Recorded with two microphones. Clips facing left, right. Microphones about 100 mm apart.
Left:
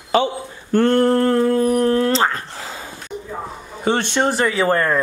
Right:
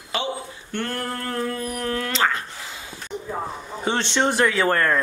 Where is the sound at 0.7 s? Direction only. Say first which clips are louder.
Left 14 dB; 30° left (ahead or behind).